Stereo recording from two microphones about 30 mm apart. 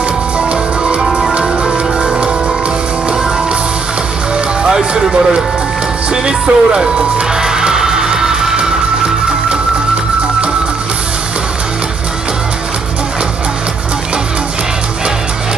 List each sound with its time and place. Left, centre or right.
0.4 s music: right
1.6 s music: right
4.6 s music: right
6.2 s speech: right
7.4 s music: right